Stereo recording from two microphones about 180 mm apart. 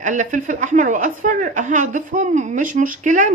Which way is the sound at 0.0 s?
45° right (ahead or behind).